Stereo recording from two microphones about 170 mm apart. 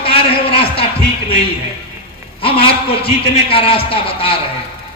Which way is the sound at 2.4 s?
30° left (ahead or behind).